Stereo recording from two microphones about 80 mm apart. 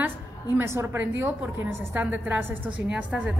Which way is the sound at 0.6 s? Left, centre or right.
Right.